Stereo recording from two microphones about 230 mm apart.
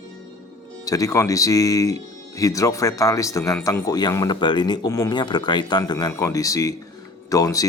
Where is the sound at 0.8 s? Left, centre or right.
Centre.